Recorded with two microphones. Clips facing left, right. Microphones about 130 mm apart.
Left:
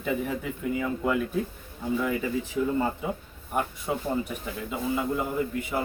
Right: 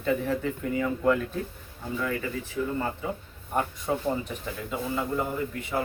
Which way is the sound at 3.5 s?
10° left (ahead or behind).